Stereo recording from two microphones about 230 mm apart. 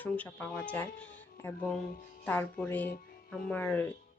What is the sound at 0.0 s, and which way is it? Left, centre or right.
Speech, centre.